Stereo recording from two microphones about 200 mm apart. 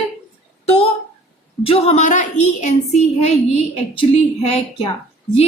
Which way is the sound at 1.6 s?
30° left (ahead or behind).